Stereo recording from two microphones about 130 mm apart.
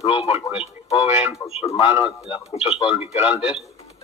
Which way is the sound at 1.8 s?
40° left (ahead or behind).